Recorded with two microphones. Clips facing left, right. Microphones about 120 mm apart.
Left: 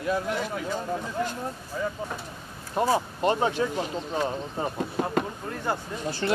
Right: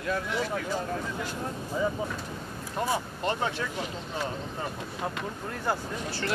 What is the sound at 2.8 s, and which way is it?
Speech, 20° left (ahead or behind).